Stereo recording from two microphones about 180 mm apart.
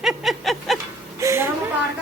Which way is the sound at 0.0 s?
Centre (ahead or behind).